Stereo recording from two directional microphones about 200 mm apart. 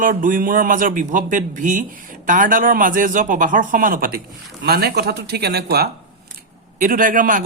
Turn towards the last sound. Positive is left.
turn(degrees=-40)  # may be behind; listen again after turning